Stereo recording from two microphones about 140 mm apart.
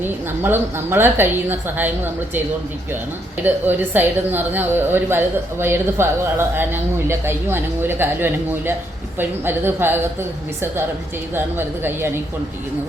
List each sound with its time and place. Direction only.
0.0 s a woman's voice: 15° right (ahead or behind)
3.4 s a woman's voice: 15° right (ahead or behind)
11.3 s a woman's voice: 15° right (ahead or behind)